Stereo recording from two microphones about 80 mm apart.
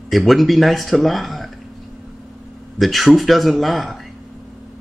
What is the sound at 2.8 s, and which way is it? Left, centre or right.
Speech, centre.